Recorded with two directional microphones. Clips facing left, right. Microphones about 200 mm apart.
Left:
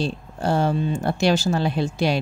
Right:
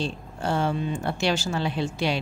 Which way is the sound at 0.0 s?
40° left (ahead or behind).